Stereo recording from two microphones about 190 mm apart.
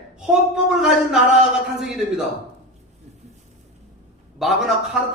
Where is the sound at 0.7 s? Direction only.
5° right (ahead or behind).